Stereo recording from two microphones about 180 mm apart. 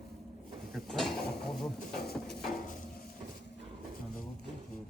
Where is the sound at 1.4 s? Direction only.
Centre (ahead or behind).